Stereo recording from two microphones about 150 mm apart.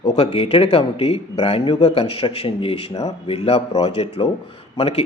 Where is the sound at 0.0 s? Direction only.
40° left (ahead or behind).